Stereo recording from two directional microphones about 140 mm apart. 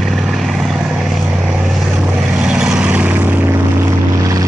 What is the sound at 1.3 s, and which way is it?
Vehicle, 10° right (ahead or behind).